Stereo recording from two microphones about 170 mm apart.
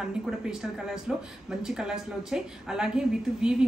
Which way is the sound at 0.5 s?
5° right (ahead or behind).